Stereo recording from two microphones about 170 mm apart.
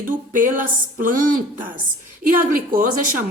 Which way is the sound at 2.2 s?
55° right (ahead or behind).